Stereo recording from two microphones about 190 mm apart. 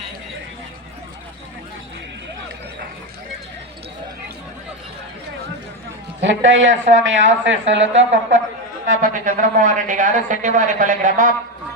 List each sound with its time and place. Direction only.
6.2 s a man's voice: 75° right (ahead or behind)
9.0 s speech: 40° right (ahead or behind)